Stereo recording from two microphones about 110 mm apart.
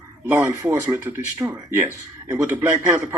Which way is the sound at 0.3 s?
25° right (ahead or behind).